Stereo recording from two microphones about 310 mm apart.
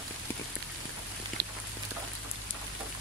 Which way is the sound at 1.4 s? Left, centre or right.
Right.